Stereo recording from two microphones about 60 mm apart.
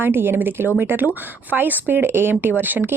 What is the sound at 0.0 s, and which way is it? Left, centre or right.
Speech, right.